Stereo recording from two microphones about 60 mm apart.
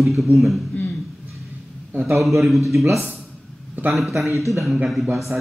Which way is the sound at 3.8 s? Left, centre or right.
Right.